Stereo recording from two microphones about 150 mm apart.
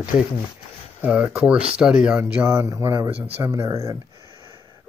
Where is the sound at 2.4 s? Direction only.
20° right (ahead or behind).